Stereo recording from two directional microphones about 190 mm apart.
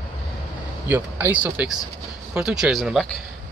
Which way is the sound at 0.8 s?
10° right (ahead or behind).